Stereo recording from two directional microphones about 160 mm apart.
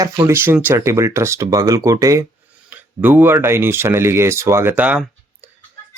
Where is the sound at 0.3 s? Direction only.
15° right (ahead or behind).